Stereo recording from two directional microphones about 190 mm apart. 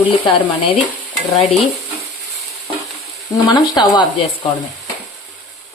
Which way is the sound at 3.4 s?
20° left (ahead or behind).